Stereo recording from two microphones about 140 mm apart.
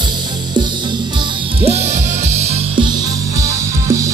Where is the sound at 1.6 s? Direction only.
50° right (ahead or behind).